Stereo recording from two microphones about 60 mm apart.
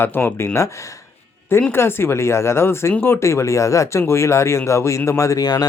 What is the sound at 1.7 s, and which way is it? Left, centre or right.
Speech, left.